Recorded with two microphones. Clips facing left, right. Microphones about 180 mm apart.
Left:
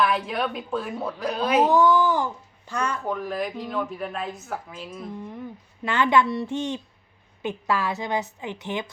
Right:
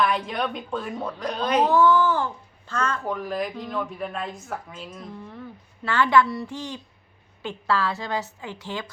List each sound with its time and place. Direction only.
0.0 s a woman's voice: centre (ahead or behind)
3.0 s a woman's voice: centre (ahead or behind)
5.1 s a child's voice: 15° left (ahead or behind)